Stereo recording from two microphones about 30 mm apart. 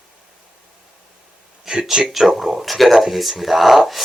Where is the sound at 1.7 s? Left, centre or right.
Right.